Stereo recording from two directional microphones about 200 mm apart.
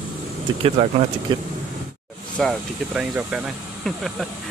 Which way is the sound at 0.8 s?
30° right (ahead or behind).